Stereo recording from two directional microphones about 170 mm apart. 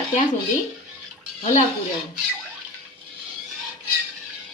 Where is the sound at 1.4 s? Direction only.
45° left (ahead or behind).